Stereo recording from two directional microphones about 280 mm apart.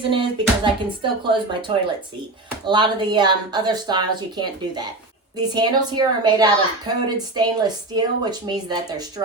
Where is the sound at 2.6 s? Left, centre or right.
Centre.